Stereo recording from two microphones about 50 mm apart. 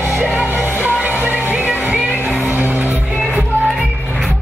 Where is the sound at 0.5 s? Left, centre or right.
Right.